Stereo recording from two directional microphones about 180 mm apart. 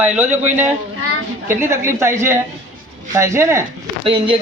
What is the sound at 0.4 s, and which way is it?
A woman's voice, 10° right (ahead or behind).